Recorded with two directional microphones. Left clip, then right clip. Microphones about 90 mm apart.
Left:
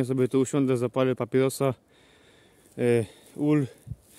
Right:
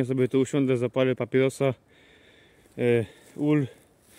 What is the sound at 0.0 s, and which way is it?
Speech, 5° left (ahead or behind).